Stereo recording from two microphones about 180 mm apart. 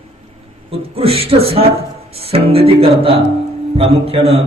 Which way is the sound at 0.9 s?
30° right (ahead or behind).